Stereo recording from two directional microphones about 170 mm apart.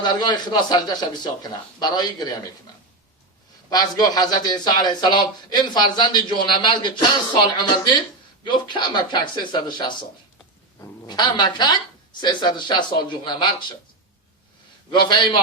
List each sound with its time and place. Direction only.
0.0 s a man's voice: 25° left (ahead or behind)
3.7 s a man's voice: 20° left (ahead or behind)
14.8 s a man's voice: 25° left (ahead or behind)